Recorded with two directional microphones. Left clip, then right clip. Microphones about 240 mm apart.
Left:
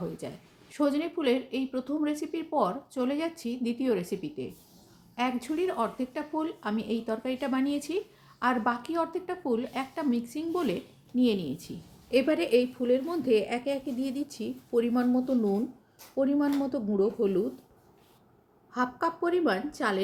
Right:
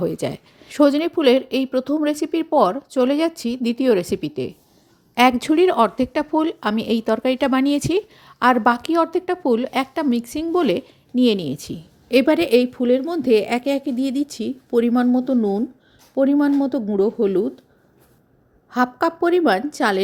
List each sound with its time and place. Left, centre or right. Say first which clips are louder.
0.2 s speech: right 15 dB; right
18.7 s speech: right 10 dB; right